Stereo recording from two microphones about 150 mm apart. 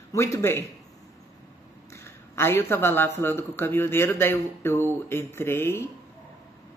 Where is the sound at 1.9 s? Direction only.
15° left (ahead or behind).